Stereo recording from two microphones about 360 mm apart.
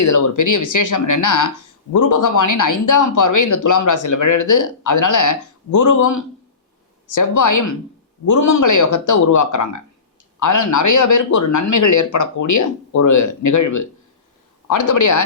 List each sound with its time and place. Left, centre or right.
0.0 s a man's voice: left